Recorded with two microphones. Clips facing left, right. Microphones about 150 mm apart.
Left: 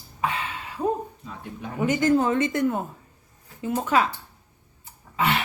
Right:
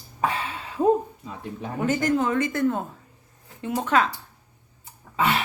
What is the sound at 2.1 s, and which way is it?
Speech, 30° left (ahead or behind).